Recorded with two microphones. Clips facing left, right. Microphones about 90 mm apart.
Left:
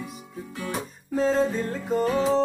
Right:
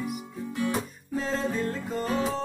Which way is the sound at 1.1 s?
25° left (ahead or behind).